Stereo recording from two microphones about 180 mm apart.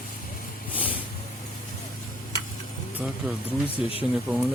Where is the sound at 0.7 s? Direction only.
10° right (ahead or behind).